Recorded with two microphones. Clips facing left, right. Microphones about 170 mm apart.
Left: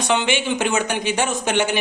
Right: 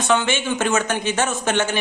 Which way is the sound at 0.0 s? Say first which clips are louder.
Even; 15° left (ahead or behind).